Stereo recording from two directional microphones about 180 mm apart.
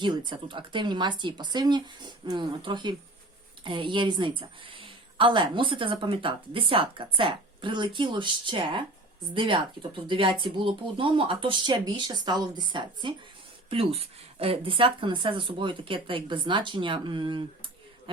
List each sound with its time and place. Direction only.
0.0 s a woman's voice: 25° right (ahead or behind)